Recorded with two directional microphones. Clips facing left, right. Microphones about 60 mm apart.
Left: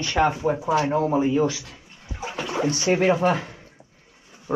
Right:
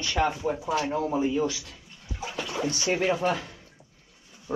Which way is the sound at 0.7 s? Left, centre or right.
Left.